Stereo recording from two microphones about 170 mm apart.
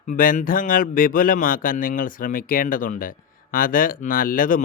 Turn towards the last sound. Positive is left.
turn(degrees=55)  # may be behind; listen again after turning